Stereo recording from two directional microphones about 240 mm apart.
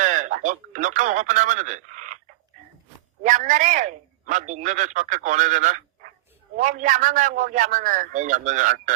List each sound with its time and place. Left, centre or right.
0.0 s speech: right
3.2 s a man's voice: right